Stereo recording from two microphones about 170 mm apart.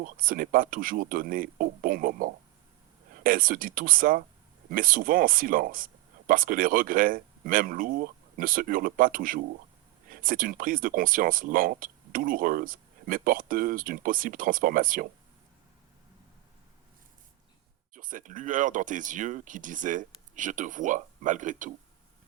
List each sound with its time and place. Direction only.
0.0 s speech: 55° right (ahead or behind)
17.9 s speech: 50° right (ahead or behind)